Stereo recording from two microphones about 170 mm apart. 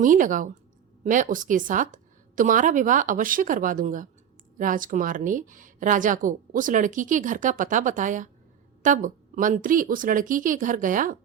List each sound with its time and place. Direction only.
0.0 s a woman's voice: 50° right (ahead or behind)